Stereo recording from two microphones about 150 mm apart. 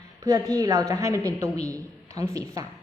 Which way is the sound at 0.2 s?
20° right (ahead or behind).